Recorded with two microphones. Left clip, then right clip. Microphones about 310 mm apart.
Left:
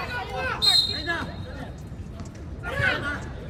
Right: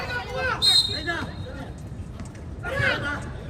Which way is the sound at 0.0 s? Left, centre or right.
Centre.